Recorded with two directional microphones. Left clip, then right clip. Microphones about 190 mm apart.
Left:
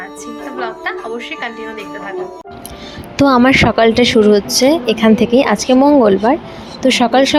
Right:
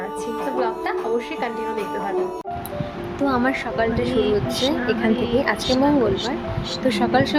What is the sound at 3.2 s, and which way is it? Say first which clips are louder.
Speech: left 12 dB; 45° left (ahead or behind).